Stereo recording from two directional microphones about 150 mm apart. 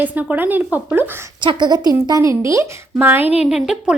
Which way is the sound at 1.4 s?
30° right (ahead or behind).